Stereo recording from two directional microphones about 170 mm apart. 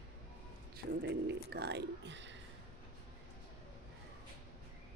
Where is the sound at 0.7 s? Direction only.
75° right (ahead or behind).